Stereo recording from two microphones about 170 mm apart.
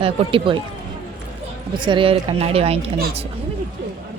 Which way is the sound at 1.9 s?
30° right (ahead or behind).